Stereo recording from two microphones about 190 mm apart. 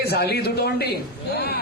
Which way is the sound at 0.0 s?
60° left (ahead or behind).